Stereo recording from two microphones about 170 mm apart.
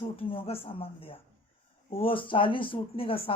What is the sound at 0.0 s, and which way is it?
Speech, 30° left (ahead or behind).